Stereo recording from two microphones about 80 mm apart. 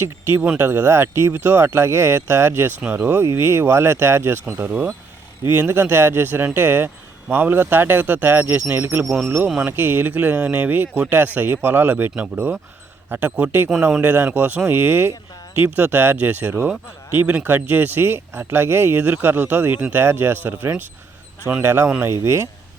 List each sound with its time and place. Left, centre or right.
0.0 s speech: right
4.6 s speech: centre
9.0 s speech: centre
9.6 s speech: right